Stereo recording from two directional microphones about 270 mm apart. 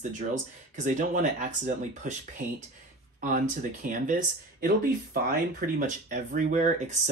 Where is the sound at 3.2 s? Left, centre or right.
Right.